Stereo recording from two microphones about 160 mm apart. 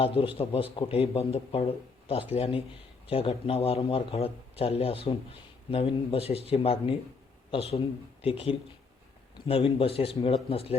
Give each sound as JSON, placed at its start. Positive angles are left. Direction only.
{"t": 0.0, "sound": "a man's voice", "side_deg": 35}